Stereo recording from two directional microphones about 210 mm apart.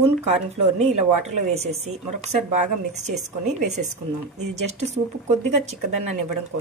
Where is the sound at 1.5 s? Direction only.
30° right (ahead or behind).